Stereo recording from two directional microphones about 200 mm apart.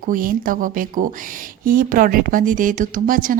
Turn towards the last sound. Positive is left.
turn(degrees=-45)  # may be behind; listen again after turning